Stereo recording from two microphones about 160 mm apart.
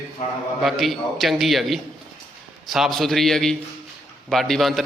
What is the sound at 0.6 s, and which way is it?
A man's voice, centre (ahead or behind).